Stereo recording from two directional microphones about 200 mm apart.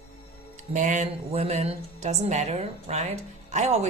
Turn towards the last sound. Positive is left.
turn(degrees=-35)  # may be behind; listen again after turning